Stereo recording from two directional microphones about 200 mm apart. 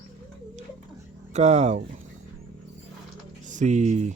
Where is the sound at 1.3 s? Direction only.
35° right (ahead or behind).